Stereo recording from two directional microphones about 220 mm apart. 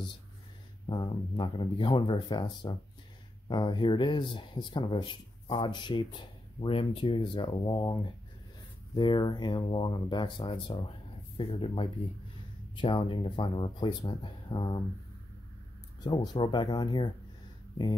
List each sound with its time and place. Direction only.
0.8 s speech: 20° left (ahead or behind)
16.0 s speech: 20° left (ahead or behind)